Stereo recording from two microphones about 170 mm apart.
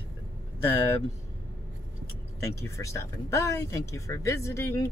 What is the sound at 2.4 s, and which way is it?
Speech, 15° left (ahead or behind).